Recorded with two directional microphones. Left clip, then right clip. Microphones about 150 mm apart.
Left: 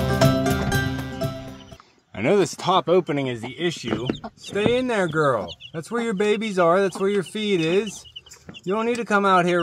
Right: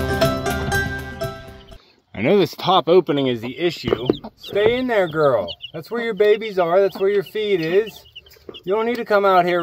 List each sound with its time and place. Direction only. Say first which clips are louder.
0.0 s music: right 1 dB; centre (ahead or behind)
2.1 s speech: right 3 dB; 20° right (ahead or behind)
2.9 s speech: right 5 dB; 45° right (ahead or behind)
3.2 s speech: right 5 dB; 70° right (ahead or behind); by 5.8 s 50° right (ahead or behind)
5.9 s speech: right 5 dB; 40° right (ahead or behind)